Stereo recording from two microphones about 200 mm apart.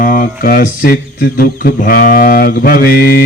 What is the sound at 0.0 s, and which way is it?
Speech, 45° left (ahead or behind).